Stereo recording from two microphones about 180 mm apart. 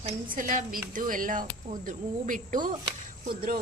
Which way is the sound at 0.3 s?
45° right (ahead or behind).